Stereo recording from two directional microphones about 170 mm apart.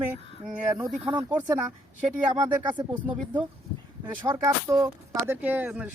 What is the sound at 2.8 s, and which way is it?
Speech, 30° right (ahead or behind).